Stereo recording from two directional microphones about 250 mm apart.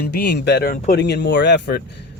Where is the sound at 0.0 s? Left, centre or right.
Left.